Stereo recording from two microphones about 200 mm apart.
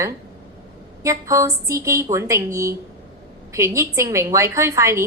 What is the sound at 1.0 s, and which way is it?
A woman's voice, 15° right (ahead or behind).